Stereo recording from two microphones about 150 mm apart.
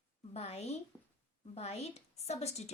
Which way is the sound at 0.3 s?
45° left (ahead or behind).